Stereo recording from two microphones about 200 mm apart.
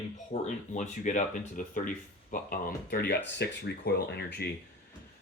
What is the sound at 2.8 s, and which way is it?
Speech, 55° left (ahead or behind).